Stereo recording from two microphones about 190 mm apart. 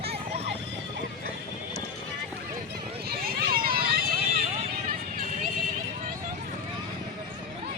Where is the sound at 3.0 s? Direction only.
55° right (ahead or behind).